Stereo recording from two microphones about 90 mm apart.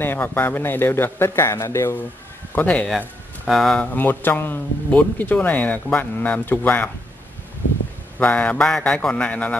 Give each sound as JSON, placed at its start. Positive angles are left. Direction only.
{"t": 0.0, "sound": "speech", "side_deg": 25}
{"t": 2.5, "sound": "a man's voice", "side_deg": 15}
{"t": 3.4, "sound": "speech", "side_deg": 0}
{"t": 3.9, "sound": "speech", "side_deg": 20}
{"t": 8.2, "sound": "a man's voice", "side_deg": 15}